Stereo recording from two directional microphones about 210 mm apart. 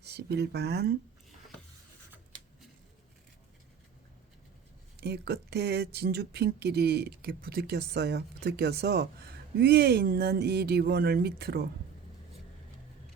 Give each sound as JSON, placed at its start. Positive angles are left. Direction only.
{"t": 0.0, "sound": "speech", "side_deg": -50}
{"t": 4.9, "sound": "speech", "side_deg": -50}